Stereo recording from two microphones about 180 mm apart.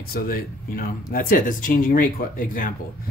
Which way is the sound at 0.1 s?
55° left (ahead or behind).